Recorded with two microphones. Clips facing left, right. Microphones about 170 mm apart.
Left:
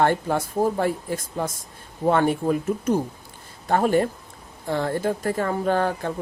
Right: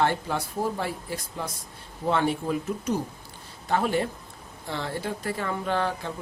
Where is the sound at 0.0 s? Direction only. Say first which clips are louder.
Left 5 dB; 50° left (ahead or behind).